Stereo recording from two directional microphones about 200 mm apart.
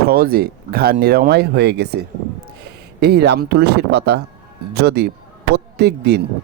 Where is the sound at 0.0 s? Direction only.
50° right (ahead or behind).